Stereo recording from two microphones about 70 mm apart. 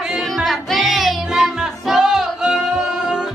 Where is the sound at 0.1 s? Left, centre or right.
Centre.